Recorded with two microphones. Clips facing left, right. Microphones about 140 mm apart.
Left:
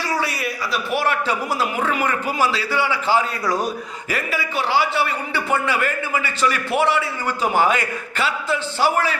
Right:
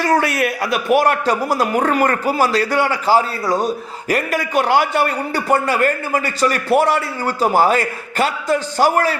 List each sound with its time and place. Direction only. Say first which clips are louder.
0.0 s a man's voice: right 7 dB; 50° right (ahead or behind)
3.4 s speech: right 3 dB; 25° right (ahead or behind)
4.1 s a man's voice: right 7 dB; 50° right (ahead or behind)